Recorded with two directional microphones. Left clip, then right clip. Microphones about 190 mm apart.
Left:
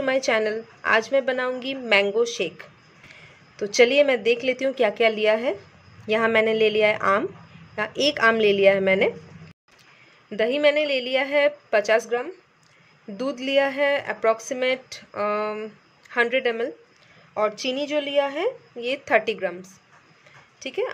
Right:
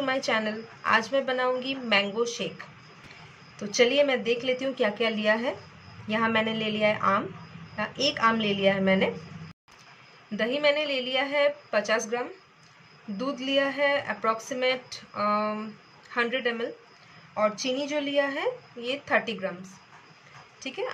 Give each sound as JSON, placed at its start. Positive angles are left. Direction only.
{"t": 0.0, "sound": "a woman's voice", "side_deg": 40}
{"t": 3.5, "sound": "a woman's voice", "side_deg": 40}
{"t": 10.3, "sound": "a woman's voice", "side_deg": 40}
{"t": 13.2, "sound": "a woman's voice", "side_deg": 40}